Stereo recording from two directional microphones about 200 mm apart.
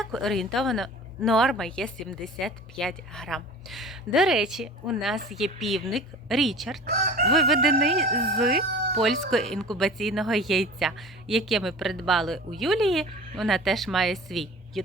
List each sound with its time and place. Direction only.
0.0 s speech: centre (ahead or behind)
6.8 s chicken: 45° right (ahead or behind)
7.3 s speech: centre (ahead or behind)